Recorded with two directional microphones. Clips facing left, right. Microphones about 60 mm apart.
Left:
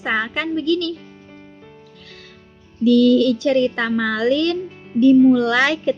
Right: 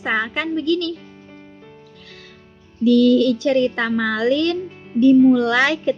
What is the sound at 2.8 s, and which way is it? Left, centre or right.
Speech, right.